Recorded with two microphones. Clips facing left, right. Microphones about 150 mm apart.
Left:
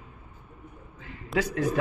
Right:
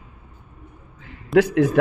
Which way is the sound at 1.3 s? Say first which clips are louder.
Right 10 dB; 65° right (ahead or behind).